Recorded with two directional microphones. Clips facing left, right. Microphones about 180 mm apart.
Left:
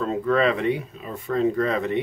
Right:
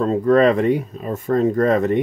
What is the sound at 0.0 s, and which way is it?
Speech, 40° right (ahead or behind).